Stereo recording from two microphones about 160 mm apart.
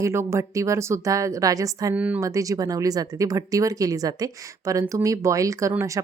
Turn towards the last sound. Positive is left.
turn(degrees=-20)  # may be behind; listen again after turning